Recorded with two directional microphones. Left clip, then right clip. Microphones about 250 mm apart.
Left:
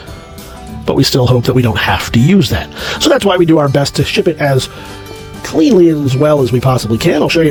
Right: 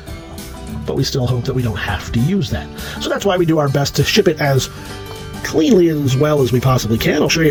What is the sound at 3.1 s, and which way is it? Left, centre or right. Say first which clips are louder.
Speech: left 6 dB; left.